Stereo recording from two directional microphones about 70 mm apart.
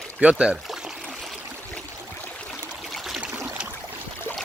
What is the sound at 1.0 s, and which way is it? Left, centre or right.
Stream, centre.